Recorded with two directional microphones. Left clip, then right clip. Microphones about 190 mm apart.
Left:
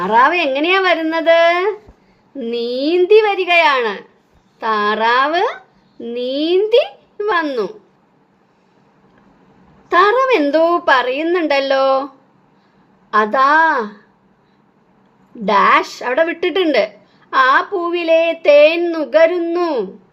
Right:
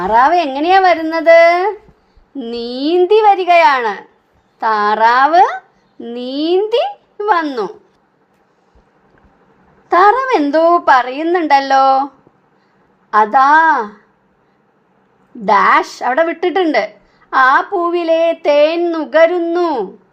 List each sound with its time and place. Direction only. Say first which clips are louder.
0.0 s speech: right 2 dB; 30° right (ahead or behind)
9.9 s speech: right 2 dB; 25° right (ahead or behind)
15.4 s speech: right 2 dB; 25° right (ahead or behind)